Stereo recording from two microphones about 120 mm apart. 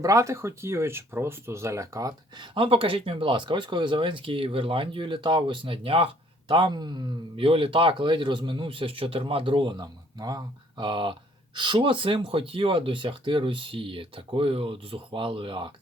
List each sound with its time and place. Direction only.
0.0 s speech: 25° right (ahead or behind); by 15.7 s 45° right (ahead or behind)